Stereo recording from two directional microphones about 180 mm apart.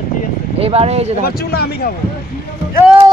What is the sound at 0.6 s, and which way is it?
Speech, 35° right (ahead or behind).